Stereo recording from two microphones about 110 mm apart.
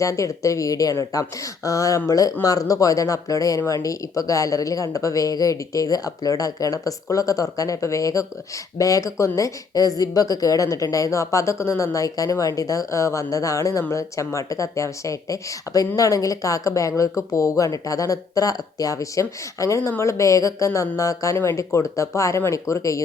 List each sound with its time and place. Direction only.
0.0 s speech: 30° left (ahead or behind)